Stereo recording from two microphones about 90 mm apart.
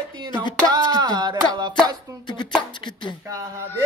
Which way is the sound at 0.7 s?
50° right (ahead or behind).